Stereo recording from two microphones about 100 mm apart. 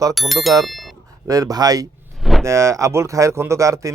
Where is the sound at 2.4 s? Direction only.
30° right (ahead or behind).